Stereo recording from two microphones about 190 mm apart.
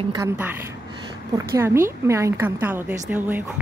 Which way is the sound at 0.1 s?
10° right (ahead or behind).